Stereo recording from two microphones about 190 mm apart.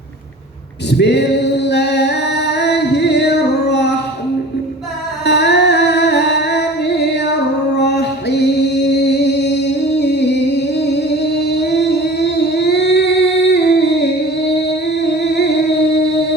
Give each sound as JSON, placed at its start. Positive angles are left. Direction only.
{"t": 0.9, "sound": "singing", "side_deg": 65}
{"t": 5.2, "sound": "music", "side_deg": 65}
{"t": 11.4, "sound": "singing", "side_deg": 65}
{"t": 15.1, "sound": "music", "side_deg": 65}